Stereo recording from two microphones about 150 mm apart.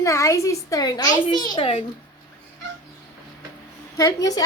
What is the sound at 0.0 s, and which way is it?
A child's voice, 20° left (ahead or behind).